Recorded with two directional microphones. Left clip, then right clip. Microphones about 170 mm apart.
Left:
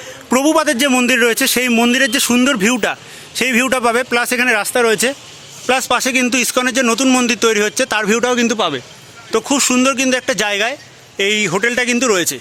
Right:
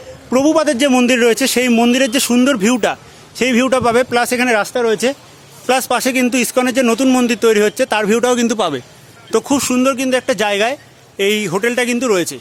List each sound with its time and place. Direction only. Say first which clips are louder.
0.3 s a man's voice: even; 5° left (ahead or behind)
4.6 s speech: left 2 dB; 15° left (ahead or behind)
5.6 s a man's voice: even; 10° right (ahead or behind)
8.2 s a man's voice: even; 20° right (ahead or behind)
9.4 s a man's voice: left 2 dB; 10° right (ahead or behind)